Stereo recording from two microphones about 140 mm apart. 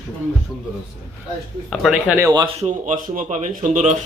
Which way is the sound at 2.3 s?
30° right (ahead or behind).